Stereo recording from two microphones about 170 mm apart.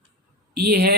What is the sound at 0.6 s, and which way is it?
Speech, 70° right (ahead or behind).